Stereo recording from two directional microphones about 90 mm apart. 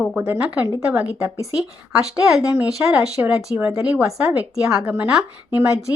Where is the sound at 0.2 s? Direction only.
20° right (ahead or behind).